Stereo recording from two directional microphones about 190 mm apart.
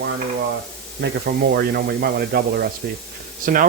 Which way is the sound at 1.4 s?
55° right (ahead or behind).